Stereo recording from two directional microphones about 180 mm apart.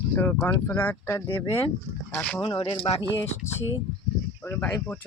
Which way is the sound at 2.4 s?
30° left (ahead or behind).